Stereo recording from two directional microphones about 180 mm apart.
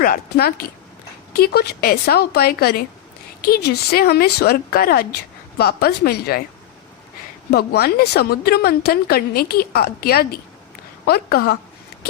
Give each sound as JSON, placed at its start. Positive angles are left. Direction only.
{"t": 0.0, "sound": "a woman's voice", "side_deg": 55}
{"t": 7.5, "sound": "a woman's voice", "side_deg": 60}